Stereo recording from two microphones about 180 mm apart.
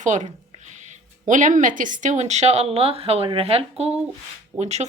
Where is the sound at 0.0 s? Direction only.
40° right (ahead or behind).